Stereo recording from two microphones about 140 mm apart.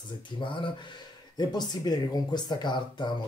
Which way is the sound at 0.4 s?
35° left (ahead or behind).